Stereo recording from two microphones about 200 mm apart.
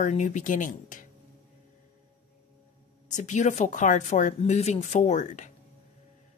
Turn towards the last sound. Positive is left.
turn(degrees=35)  # may be behind; listen again after turning